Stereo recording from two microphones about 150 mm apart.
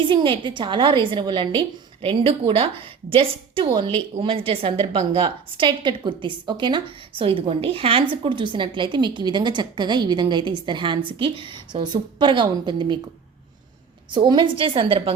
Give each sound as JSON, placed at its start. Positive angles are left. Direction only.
{"t": 0.0, "sound": "a woman's voice", "side_deg": -35}
{"t": 14.1, "sound": "a woman's voice", "side_deg": -35}